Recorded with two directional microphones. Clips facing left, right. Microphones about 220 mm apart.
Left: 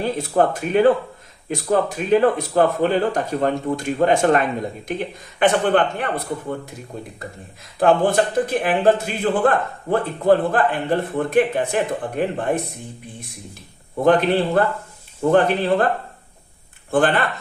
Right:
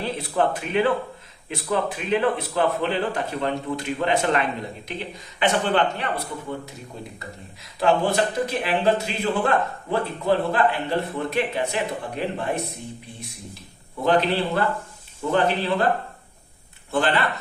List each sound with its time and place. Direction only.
0.0 s a man's voice: 45° left (ahead or behind)
14.0 s a man's voice: 50° left (ahead or behind)
16.9 s a man's voice: 50° left (ahead or behind)